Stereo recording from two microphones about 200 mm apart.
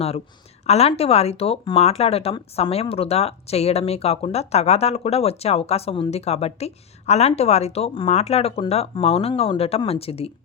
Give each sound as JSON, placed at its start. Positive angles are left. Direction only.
{"t": 0.7, "sound": "speech", "side_deg": 30}